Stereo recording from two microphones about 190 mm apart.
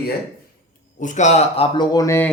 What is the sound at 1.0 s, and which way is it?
Speech, 40° left (ahead or behind).